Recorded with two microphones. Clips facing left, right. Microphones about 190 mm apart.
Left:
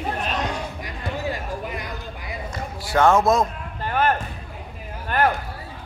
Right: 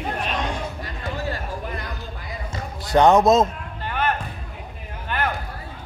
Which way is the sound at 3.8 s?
45° left (ahead or behind).